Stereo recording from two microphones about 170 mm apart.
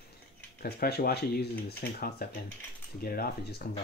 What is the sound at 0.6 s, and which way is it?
Cutlery, 65° left (ahead or behind).